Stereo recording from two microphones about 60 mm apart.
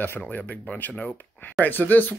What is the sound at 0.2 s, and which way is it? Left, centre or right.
Speech, left.